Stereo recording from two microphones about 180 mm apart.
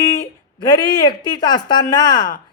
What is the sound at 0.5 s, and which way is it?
Speech, 25° left (ahead or behind).